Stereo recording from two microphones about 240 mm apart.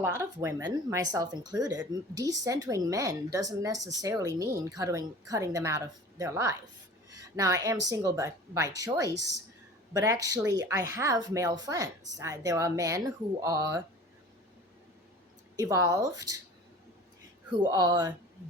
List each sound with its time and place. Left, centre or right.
0.2 s speech: centre
15.5 s speech: centre
17.6 s speech: centre